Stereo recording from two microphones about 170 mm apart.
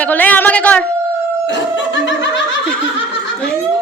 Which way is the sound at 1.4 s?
90° left.